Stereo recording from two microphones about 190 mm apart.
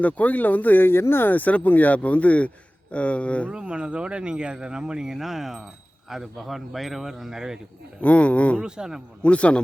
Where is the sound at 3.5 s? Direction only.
5° right (ahead or behind).